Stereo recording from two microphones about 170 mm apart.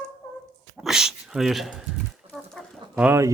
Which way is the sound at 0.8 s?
5° right (ahead or behind).